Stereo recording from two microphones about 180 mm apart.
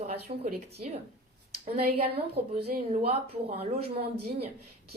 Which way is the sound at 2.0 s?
30° right (ahead or behind).